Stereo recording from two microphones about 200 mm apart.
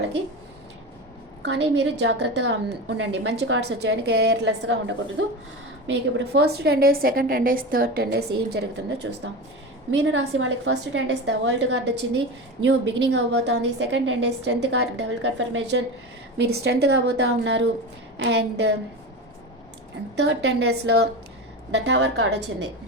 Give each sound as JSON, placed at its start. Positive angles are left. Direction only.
{"t": 1.4, "sound": "a woman's voice", "side_deg": -60}
{"t": 8.4, "sound": "a woman's voice", "side_deg": -60}
{"t": 20.1, "sound": "a woman's voice", "side_deg": -60}